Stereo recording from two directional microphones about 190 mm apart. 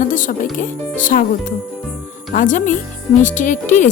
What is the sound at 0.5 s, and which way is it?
A woman's voice, 45° left (ahead or behind).